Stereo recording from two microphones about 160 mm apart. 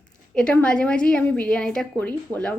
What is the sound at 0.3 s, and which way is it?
A woman's voice, 5° left (ahead or behind).